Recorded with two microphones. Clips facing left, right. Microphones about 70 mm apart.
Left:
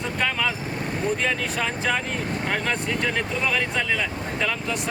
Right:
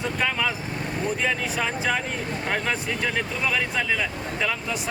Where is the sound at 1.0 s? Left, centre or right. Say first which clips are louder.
Left 1 dB; centre.